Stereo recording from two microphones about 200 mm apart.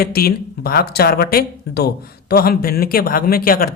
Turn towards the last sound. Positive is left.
turn(degrees=45)  # may be behind; listen again after turning